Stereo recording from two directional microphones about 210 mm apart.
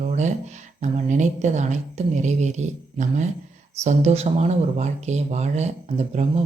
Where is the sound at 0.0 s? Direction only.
35° right (ahead or behind).